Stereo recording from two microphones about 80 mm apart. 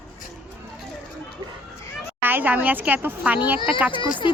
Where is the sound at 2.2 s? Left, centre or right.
Right.